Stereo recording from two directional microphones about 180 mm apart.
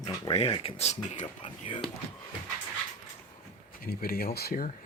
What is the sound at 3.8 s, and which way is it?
Speech, 55° left (ahead or behind).